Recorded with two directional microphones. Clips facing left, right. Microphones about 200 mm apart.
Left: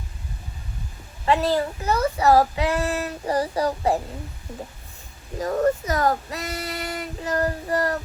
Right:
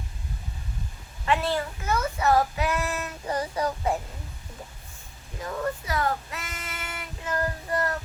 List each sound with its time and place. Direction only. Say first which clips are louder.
1.2 s child singing: left 5 dB; 35° left (ahead or behind)
5.4 s child singing: left 9 dB; 40° left (ahead or behind)